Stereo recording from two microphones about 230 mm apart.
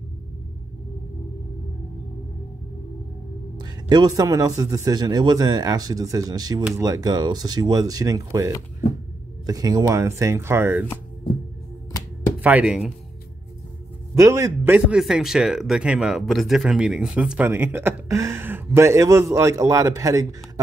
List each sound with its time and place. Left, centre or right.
3.5 s a man's voice: centre
12.4 s speech: centre
14.1 s a man's voice: centre